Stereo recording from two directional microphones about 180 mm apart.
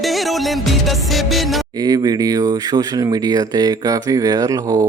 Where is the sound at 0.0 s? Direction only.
Centre (ahead or behind).